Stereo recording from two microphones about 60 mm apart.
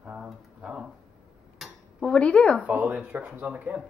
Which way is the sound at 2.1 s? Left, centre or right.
Centre.